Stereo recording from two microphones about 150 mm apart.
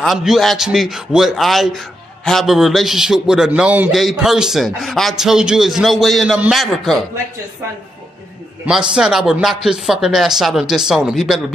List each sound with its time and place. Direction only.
0.0 s a man's voice: centre (ahead or behind)
8.6 s a man's voice: 5° right (ahead or behind)